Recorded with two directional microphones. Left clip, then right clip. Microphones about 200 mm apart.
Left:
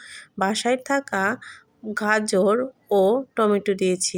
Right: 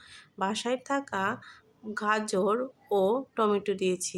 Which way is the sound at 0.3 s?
25° left (ahead or behind).